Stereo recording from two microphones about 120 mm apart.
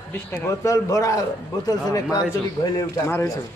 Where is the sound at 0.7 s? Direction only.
25° left (ahead or behind).